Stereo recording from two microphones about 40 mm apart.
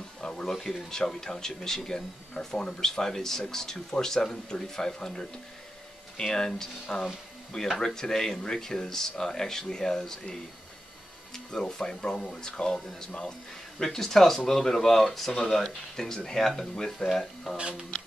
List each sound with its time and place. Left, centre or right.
0.2 s a sound: centre
0.5 s speech: centre
2.3 s speech: left
2.8 s speech: centre
11.6 s speech: left
17.6 s speech: right